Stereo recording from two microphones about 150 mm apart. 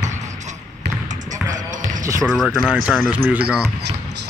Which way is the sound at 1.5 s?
55° right (ahead or behind).